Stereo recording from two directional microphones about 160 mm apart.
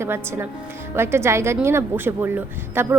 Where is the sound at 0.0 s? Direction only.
15° right (ahead or behind).